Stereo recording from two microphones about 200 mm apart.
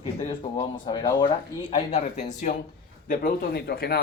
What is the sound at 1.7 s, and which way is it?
Speech, 35° left (ahead or behind).